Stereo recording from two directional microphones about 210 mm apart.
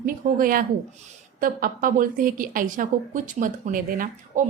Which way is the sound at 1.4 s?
40° right (ahead or behind).